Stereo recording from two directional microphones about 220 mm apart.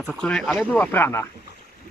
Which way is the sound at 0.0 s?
5° left (ahead or behind).